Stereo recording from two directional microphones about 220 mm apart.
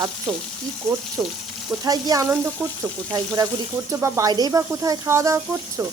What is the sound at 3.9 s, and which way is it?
Speech, 10° right (ahead or behind).